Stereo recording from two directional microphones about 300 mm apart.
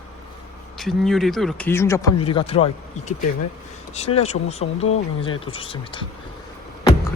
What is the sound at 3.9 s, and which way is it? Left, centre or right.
A man's voice, left.